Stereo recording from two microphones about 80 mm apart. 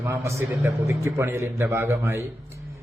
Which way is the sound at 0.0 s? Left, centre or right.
Right.